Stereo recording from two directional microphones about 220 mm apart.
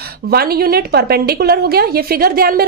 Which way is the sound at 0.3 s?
45° right (ahead or behind).